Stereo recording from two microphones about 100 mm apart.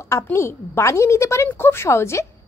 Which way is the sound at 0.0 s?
30° left (ahead or behind).